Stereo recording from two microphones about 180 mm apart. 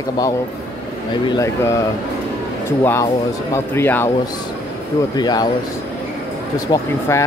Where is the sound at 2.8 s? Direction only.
15° left (ahead or behind).